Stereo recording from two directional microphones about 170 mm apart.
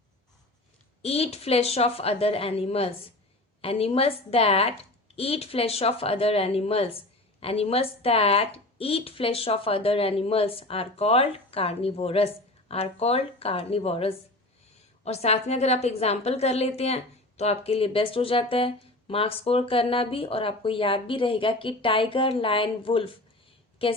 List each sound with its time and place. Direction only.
1.0 s a woman's voice: 35° left (ahead or behind)